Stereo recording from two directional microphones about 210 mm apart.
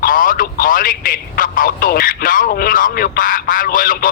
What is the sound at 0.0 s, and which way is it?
Speech, 40° left (ahead or behind).